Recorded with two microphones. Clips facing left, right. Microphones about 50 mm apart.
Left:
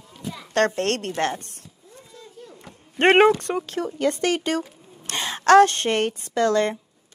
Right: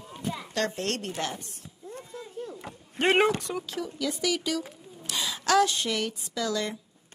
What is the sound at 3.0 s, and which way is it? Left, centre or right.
A woman's voice, left.